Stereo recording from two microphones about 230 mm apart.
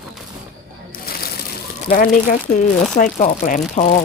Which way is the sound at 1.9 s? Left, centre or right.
Left.